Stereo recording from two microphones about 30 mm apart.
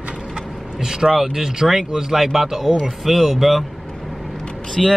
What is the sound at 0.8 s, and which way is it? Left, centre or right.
Speech, centre.